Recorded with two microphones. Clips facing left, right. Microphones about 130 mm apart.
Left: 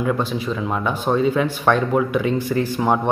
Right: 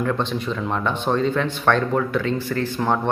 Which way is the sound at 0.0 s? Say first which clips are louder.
Left 2 dB; 10° left (ahead or behind).